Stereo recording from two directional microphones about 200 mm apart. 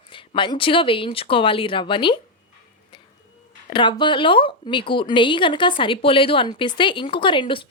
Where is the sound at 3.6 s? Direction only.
25° left (ahead or behind).